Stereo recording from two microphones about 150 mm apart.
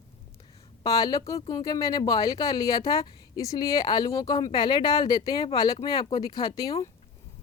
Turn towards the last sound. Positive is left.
turn(degrees=25)  # may be behind; listen again after turning